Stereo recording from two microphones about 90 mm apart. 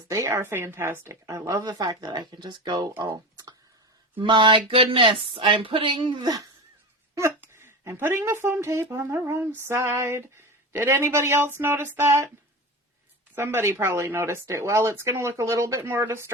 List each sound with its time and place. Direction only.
0.1 s speech: 35° right (ahead or behind); by 2.9 s 50° right (ahead or behind)
3.0 s a sound: 45° right (ahead or behind)
4.2 s speech: 65° right (ahead or behind)
7.2 s speech: 30° right (ahead or behind)
13.3 s speech: 30° right (ahead or behind)